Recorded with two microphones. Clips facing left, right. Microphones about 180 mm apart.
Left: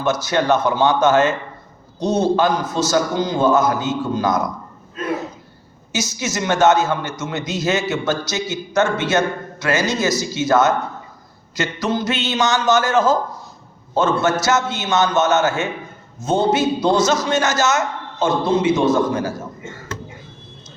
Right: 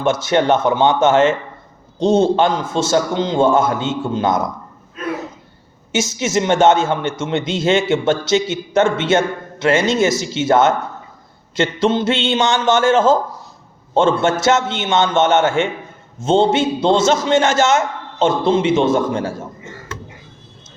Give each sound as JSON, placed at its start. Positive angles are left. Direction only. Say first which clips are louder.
{"t": 0.0, "sound": "a man's voice", "louder": "right 3 dB", "side_deg": -25}
{"t": 5.9, "sound": "a man's voice", "louder": "right 6 dB", "side_deg": -25}